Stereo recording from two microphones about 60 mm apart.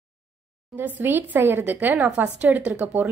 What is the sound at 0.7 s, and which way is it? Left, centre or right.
A woman's voice, right.